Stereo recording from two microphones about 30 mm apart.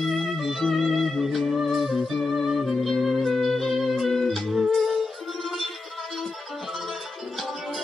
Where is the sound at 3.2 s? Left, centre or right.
Centre.